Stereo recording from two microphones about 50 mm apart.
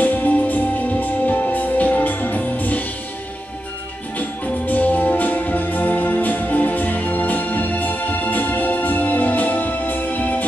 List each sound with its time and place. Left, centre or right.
0.0 s music: left
4.2 s music: left